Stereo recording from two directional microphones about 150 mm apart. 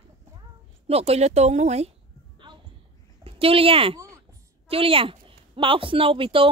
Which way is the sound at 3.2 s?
40° right (ahead or behind).